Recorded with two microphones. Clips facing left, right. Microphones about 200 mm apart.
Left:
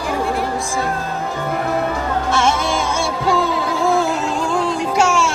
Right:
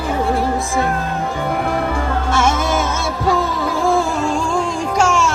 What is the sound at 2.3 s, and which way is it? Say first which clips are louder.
Music: right 1 dB; 5° right (ahead or behind).